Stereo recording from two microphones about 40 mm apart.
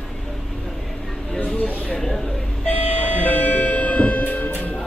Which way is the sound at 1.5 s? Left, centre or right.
Left.